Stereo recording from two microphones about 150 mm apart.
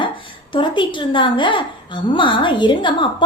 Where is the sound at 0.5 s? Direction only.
35° left (ahead or behind).